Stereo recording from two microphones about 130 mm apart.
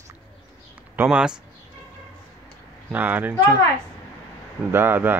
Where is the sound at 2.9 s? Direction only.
15° right (ahead or behind).